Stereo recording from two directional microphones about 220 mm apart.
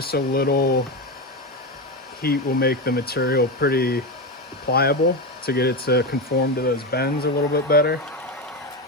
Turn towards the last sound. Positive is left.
turn(degrees=45)  # may be behind; listen again after turning